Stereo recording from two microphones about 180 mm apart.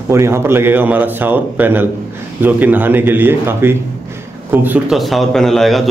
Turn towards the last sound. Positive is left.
turn(degrees=0)  # may be behind; listen again after turning